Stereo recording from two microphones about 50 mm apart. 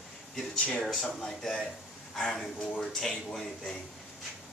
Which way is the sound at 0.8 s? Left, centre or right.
Centre.